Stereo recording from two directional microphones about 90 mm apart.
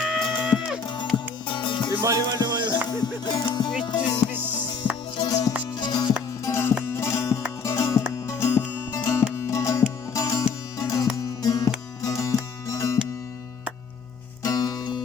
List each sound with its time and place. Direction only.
0.0 s music: 5° right (ahead or behind)
1.1 s music: 60° left (ahead or behind)
2.0 s music: 35° right (ahead or behind)
2.4 s music: 55° right (ahead or behind)
2.9 s music: 50° left (ahead or behind)
5.1 s music: 55° left (ahead or behind)
6.4 s music: 30° left (ahead or behind)
14.4 s music: 45° left (ahead or behind)